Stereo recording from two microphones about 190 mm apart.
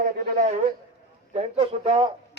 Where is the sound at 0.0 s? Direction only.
40° right (ahead or behind).